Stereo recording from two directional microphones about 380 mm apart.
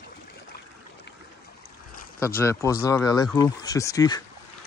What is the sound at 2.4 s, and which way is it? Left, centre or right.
Speech, centre.